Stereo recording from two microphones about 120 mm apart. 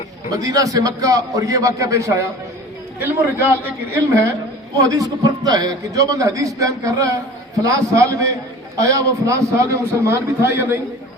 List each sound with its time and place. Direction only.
0.3 s a man's voice: 30° right (ahead or behind)